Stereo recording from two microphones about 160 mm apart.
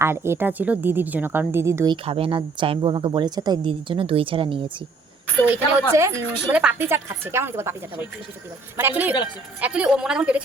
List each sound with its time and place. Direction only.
0.0 s a woman's voice: 15° right (ahead or behind)
2.0 s speech: 35° right (ahead or behind)
5.9 s a woman's voice: 15° right (ahead or behind)